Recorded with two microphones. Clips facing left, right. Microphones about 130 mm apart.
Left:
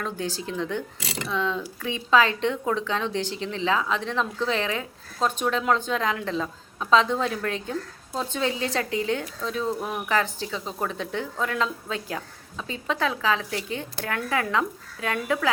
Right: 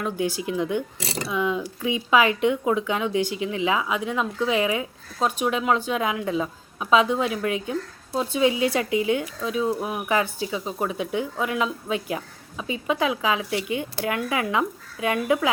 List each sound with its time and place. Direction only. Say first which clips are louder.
0.0 s speech: right 4 dB; 15° right (ahead or behind)
0.9 s speech: right 3 dB; 35° right (ahead or behind)
1.3 s speech: right 2 dB; 15° right (ahead or behind)